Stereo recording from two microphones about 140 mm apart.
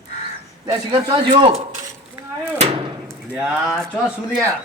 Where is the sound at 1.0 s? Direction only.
30° right (ahead or behind).